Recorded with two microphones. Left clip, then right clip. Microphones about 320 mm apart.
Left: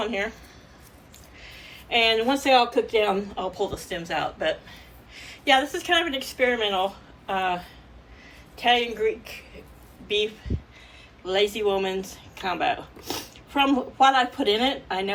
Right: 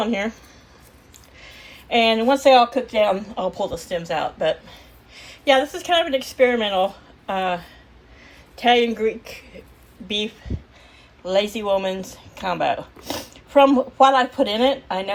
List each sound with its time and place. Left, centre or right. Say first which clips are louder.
0.0 s speech: right 4 dB; centre
1.4 s speech: right 2 dB; centre
11.3 s speech: right 3 dB; centre